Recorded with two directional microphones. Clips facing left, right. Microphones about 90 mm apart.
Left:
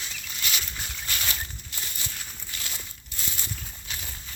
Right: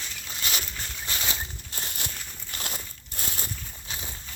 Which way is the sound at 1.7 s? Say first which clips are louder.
Right 2 dB; 40° right (ahead or behind).